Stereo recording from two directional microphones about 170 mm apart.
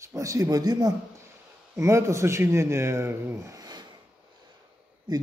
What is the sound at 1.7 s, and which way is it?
A man's voice, 15° right (ahead or behind).